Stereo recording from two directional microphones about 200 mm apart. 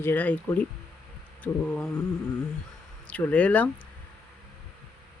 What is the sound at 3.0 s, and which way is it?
Speech, 5° left (ahead or behind).